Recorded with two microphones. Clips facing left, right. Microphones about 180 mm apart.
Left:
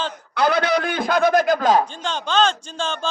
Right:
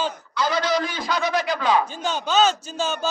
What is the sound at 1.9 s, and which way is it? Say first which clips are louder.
A man's voice: right 1 dB; 10° right (ahead or behind).